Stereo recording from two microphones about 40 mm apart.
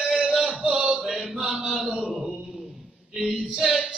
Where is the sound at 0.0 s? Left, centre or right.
Centre.